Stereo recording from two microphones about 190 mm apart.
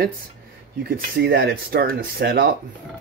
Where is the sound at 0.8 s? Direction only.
50° right (ahead or behind).